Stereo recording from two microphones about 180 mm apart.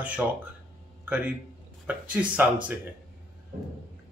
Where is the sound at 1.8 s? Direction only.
10° right (ahead or behind).